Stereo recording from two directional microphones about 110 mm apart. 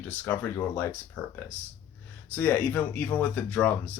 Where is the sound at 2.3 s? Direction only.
15° left (ahead or behind).